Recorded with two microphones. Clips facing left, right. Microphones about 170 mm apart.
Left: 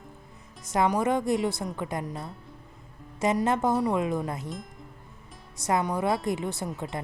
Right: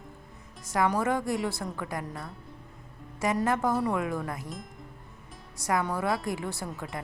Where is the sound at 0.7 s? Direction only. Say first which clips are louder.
Left 2 dB; 20° left (ahead or behind).